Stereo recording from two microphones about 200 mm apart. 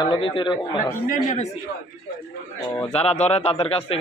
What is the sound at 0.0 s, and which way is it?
Speech, 25° left (ahead or behind).